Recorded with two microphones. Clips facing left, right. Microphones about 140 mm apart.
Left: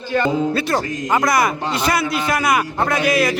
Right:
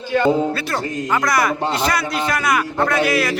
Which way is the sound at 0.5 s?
20° left (ahead or behind).